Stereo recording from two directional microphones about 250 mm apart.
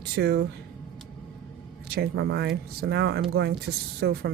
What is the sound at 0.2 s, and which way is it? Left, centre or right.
Speech, right.